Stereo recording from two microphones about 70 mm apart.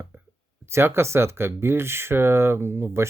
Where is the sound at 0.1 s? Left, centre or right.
Right.